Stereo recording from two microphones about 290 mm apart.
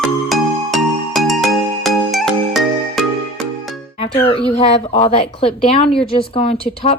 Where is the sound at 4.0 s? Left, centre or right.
Centre.